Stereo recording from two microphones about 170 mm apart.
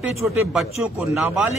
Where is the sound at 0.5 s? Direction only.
Centre (ahead or behind).